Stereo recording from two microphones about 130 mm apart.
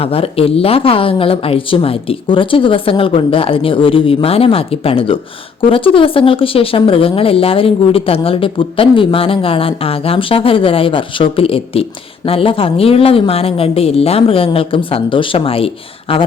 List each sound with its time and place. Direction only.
0.0 s speech: 50° left (ahead or behind)